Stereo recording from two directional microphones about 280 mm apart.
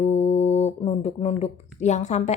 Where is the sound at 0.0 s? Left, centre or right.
Left.